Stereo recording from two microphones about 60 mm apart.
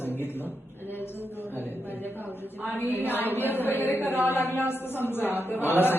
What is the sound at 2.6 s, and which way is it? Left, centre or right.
Speech, left.